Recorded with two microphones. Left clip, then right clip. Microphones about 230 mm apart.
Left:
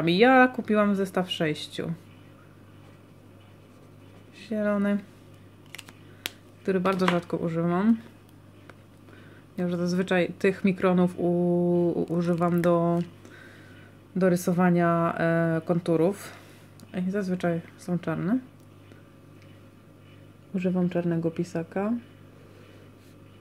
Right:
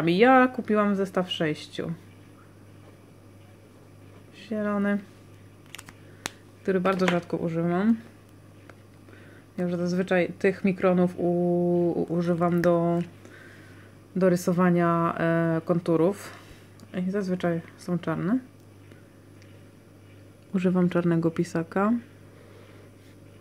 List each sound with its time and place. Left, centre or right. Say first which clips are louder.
0.0 s speech: even; centre
4.4 s speech: left 2 dB; centre
6.6 s speech: right 1 dB; centre
9.6 s speech: even; centre
20.5 s speech: right 3 dB; centre